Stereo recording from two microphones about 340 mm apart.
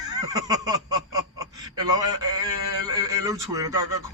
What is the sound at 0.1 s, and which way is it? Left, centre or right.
A man's voice, centre.